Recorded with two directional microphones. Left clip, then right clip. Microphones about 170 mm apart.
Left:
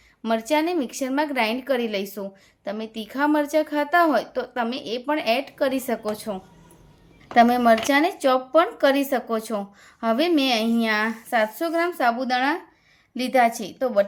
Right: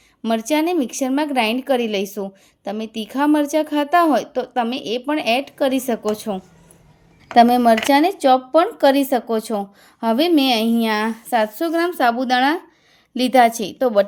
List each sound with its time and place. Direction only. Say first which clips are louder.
0.2 s a woman's voice: right 3 dB; 35° right (ahead or behind)